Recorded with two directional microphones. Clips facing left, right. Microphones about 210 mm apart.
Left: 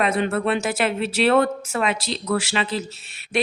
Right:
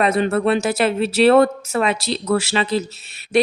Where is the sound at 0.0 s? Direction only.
40° right (ahead or behind).